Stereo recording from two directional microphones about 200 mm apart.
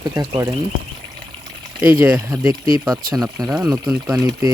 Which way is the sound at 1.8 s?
10° right (ahead or behind).